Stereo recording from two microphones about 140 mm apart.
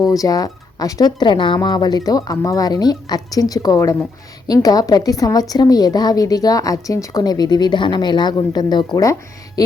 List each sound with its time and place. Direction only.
0.0 s a woman's voice: 25° left (ahead or behind)